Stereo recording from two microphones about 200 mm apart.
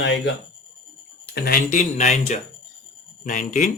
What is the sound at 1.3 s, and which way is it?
Speech, 50° left (ahead or behind).